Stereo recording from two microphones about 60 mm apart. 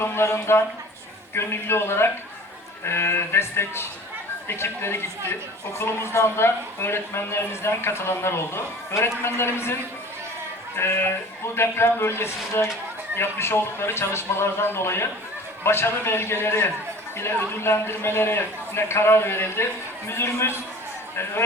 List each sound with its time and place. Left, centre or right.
0.0 s a man's voice: left
10.8 s a man's voice: left